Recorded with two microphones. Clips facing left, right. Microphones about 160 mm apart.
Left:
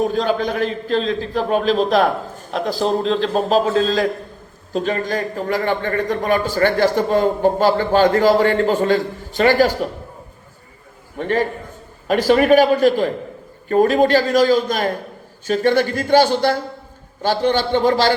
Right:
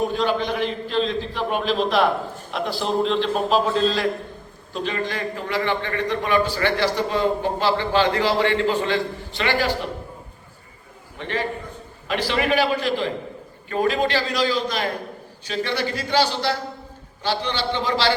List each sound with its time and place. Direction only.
0.1 s a man's voice: 40° left (ahead or behind)
11.2 s a man's voice: 45° left (ahead or behind)